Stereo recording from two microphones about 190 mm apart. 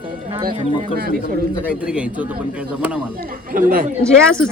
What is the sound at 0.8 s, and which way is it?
Speech, 50° right (ahead or behind).